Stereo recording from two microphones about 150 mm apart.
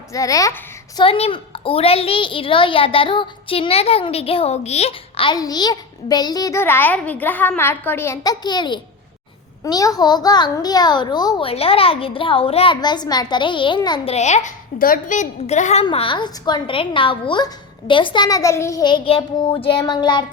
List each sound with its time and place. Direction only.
0.1 s a child's voice: 20° left (ahead or behind)
0.9 s a woman's voice: 40° left (ahead or behind)
11.4 s a woman's voice: 40° left (ahead or behind)
14.1 s a child's voice: 50° left (ahead or behind)
14.8 s a woman's voice: 70° left (ahead or behind); by 15.8 s 50° left (ahead or behind)
15.8 s a woman's voice: 35° left (ahead or behind)